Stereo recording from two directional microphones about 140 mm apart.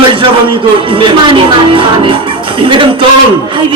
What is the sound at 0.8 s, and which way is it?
Speech, 40° right (ahead or behind).